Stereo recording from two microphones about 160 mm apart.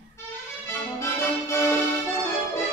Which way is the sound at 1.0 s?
15° left (ahead or behind).